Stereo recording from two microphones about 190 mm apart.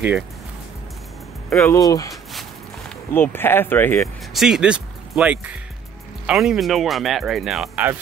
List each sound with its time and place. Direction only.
1.6 s speech: 15° left (ahead or behind)
4.3 s speech: centre (ahead or behind)